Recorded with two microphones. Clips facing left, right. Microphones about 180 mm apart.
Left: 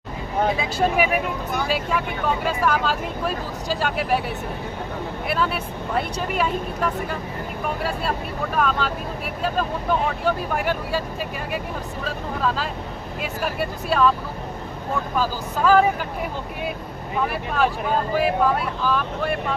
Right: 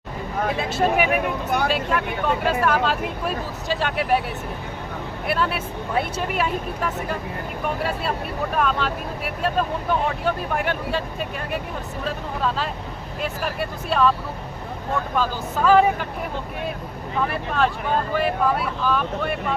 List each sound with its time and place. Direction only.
0.5 s speech: centre (ahead or behind)
1.5 s speech: 60° right (ahead or behind)
1.7 s speech: centre (ahead or behind)
5.3 s speech: centre (ahead or behind)
15.1 s speech: centre (ahead or behind)
18.1 s speech: centre (ahead or behind)